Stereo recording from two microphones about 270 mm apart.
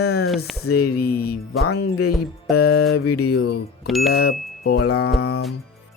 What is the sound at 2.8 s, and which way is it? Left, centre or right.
Speech, left.